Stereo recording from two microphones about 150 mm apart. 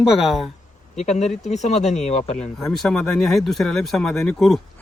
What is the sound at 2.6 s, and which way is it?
Speech, centre (ahead or behind).